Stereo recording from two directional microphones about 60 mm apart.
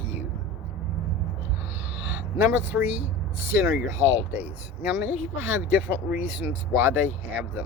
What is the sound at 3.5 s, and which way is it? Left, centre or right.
Speech, right.